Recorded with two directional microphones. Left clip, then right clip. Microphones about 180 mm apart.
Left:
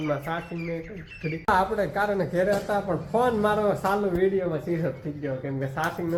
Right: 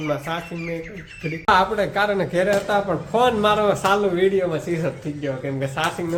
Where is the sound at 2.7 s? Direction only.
20° right (ahead or behind).